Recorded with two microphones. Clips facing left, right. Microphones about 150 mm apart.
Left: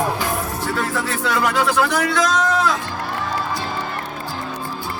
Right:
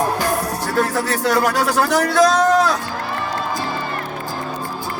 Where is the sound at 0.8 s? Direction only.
40° right (ahead or behind).